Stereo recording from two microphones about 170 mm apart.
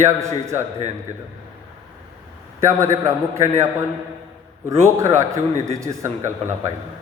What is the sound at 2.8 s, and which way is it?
Speech, 15° right (ahead or behind).